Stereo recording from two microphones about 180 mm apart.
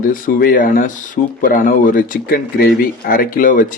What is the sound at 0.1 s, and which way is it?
Speech, 50° left (ahead or behind).